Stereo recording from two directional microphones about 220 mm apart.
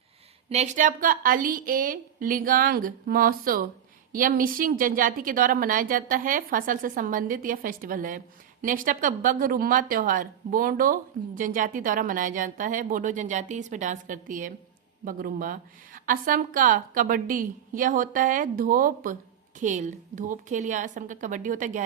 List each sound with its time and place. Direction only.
0.5 s a woman's voice: 30° right (ahead or behind)